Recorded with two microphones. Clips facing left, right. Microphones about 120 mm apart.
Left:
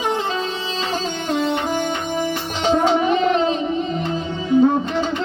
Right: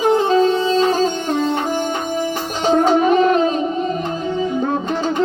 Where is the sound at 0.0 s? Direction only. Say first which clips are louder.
Right 8 dB; 40° right (ahead or behind).